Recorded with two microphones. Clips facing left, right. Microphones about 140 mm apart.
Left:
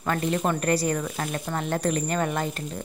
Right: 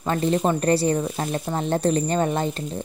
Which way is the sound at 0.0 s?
25° right (ahead or behind).